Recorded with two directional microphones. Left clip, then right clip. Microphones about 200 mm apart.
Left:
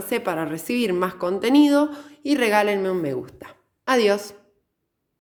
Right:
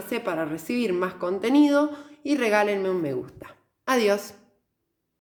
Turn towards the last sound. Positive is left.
turn(degrees=15)  # may be behind; listen again after turning